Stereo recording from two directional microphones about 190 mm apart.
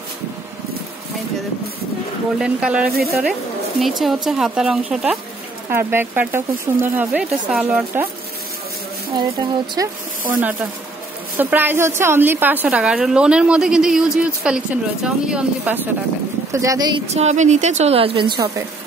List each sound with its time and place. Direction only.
2.3 s a woman's voice: 5° right (ahead or behind)
4.0 s a woman's voice: centre (ahead or behind)
9.1 s speech: 20° right (ahead or behind)
10.3 s a woman's voice: 10° right (ahead or behind)
17.1 s a woman's voice: 35° right (ahead or behind)